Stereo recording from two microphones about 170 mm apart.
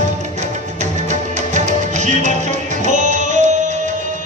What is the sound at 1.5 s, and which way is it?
Music, 45° right (ahead or behind).